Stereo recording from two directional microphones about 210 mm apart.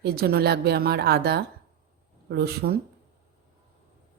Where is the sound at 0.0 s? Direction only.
50° right (ahead or behind).